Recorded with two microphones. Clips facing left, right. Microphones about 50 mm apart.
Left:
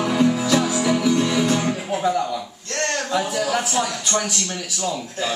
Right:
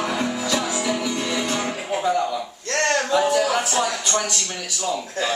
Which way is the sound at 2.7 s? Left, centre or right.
Right.